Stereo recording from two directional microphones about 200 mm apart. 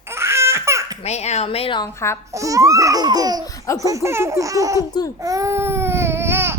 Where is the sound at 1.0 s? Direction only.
35° left (ahead or behind); by 2.1 s 15° left (ahead or behind).